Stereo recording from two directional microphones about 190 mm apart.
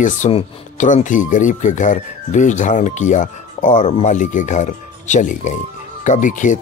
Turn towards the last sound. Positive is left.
turn(degrees=40)  # may be behind; listen again after turning